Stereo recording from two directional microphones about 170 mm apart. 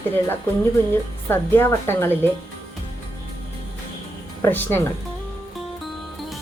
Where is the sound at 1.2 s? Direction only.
15° left (ahead or behind).